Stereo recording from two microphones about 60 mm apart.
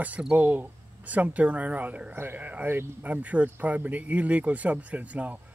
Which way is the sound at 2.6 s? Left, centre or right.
Right.